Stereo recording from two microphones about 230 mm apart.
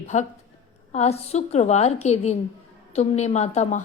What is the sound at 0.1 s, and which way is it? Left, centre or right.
A woman's voice, left.